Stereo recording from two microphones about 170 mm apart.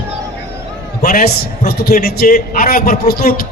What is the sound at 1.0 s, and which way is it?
A man's voice, 60° left (ahead or behind).